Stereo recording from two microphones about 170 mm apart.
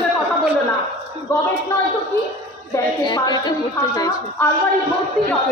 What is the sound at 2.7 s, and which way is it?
A woman's voice, 25° left (ahead or behind).